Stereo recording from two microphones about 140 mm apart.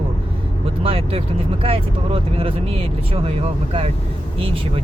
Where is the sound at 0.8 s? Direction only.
40° right (ahead or behind).